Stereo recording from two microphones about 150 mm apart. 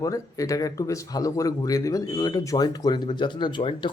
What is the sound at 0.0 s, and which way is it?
Speech, 20° left (ahead or behind).